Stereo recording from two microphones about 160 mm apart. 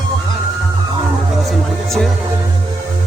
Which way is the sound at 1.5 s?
Centre (ahead or behind).